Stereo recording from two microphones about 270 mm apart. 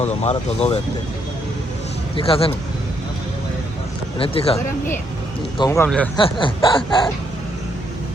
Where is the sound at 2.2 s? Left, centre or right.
Left.